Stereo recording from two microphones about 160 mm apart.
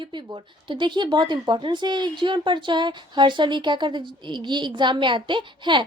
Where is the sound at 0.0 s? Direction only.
30° right (ahead or behind).